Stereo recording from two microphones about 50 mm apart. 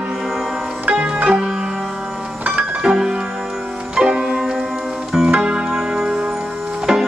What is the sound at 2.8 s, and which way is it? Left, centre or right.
Music, centre.